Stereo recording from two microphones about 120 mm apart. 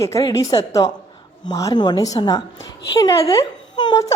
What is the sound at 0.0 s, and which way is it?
A woman's voice, 30° left (ahead or behind).